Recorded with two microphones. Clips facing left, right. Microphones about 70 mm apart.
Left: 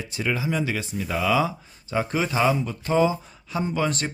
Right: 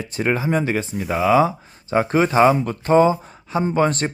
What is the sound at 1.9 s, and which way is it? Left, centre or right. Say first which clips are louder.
Speech: right 8 dB; right.